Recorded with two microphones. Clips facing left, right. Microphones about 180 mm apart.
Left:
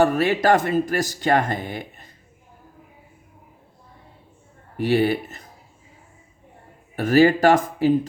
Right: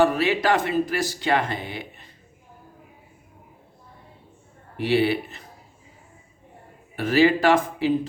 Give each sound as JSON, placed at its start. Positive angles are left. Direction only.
{"t": 0.0, "sound": "speech", "side_deg": 45}
{"t": 4.8, "sound": "speech", "side_deg": 45}
{"t": 6.9, "sound": "speech", "side_deg": 45}